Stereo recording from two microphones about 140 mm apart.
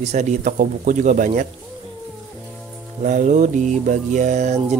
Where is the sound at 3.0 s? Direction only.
65° right (ahead or behind).